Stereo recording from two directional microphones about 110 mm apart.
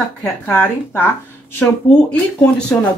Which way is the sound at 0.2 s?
20° left (ahead or behind).